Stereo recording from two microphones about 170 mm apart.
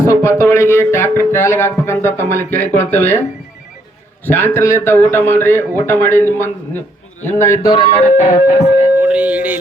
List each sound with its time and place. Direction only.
0.0 s speech: 20° left (ahead or behind)
4.3 s speech: 10° left (ahead or behind); by 8.9 s 40° left (ahead or behind)
9.0 s music: 10° right (ahead or behind)